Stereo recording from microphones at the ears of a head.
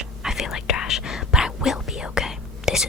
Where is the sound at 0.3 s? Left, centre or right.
Left.